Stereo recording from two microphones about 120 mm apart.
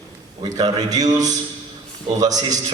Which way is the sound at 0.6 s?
30° right (ahead or behind).